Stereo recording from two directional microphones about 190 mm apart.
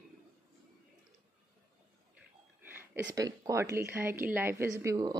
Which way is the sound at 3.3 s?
15° right (ahead or behind).